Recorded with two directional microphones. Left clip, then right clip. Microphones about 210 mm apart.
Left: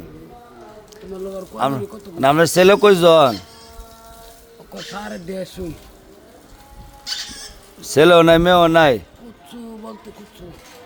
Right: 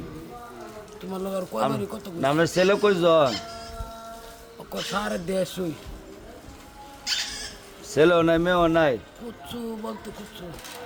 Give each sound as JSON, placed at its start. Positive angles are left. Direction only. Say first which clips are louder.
{"t": 1.5, "sound": "speech", "louder": "left 6 dB", "side_deg": -25}
{"t": 2.2, "sound": "a man's voice", "louder": "left 9 dB", "side_deg": 50}
{"t": 4.7, "sound": "speech", "louder": "right 2 dB", "side_deg": -5}
{"t": 7.8, "sound": "a man's voice", "louder": "left 8 dB", "side_deg": 50}